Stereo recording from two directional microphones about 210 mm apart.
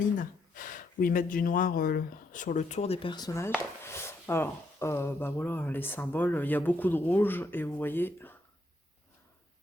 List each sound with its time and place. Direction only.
0.2 s speech: 40° left (ahead or behind); by 8.4 s 10° left (ahead or behind)